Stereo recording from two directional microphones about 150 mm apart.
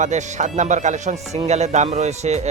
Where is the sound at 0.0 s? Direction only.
50° right (ahead or behind).